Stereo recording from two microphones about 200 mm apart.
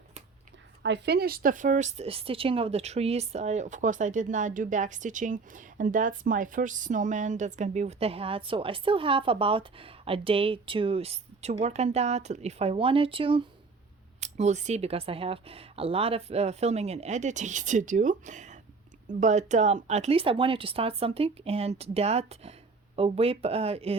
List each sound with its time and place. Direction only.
0.8 s a woman's voice: 60° right (ahead or behind); by 24.0 s 30° right (ahead or behind)